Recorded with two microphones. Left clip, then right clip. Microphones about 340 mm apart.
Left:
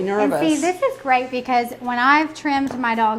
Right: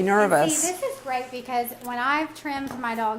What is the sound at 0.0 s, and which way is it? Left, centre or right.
Speech, right.